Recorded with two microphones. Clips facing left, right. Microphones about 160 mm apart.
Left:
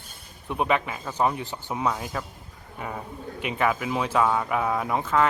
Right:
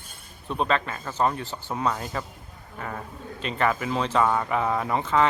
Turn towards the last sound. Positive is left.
turn(degrees=0)  # may be behind; listen again after turning